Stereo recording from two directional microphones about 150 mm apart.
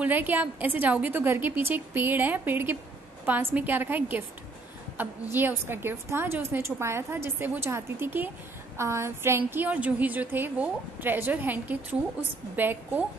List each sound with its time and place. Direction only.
0.0 s a woman's voice: 10° right (ahead or behind)